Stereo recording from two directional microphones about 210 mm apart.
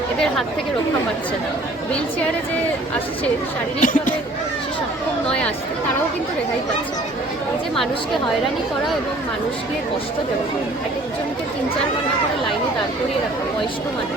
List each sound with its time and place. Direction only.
3.8 s speech: 40° left (ahead or behind)